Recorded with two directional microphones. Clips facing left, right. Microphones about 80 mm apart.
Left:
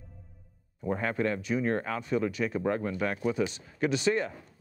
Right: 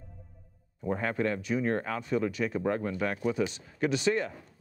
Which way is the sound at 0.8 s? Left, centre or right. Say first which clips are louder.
Even; left.